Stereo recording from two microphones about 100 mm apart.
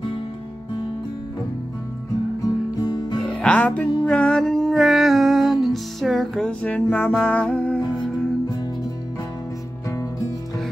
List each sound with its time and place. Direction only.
2.4 s music: 40° left (ahead or behind)
3.2 s music: 10° left (ahead or behind)
6.6 s music: 15° left (ahead or behind)